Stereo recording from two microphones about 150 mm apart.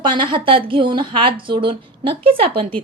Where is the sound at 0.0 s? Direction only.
35° right (ahead or behind).